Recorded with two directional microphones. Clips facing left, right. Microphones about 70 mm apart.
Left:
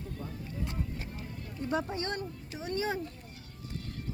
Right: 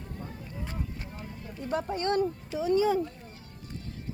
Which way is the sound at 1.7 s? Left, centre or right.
Right.